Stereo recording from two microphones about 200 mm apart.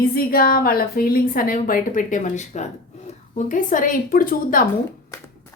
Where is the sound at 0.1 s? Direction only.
45° left (ahead or behind).